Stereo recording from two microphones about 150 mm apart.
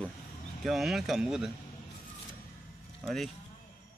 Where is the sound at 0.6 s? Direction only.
Centre (ahead or behind).